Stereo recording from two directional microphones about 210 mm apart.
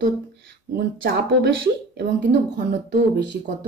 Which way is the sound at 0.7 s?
50° right (ahead or behind).